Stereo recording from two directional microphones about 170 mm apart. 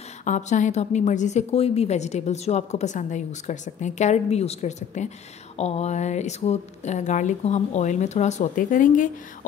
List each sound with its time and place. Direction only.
0.2 s a woman's voice: 45° left (ahead or behind)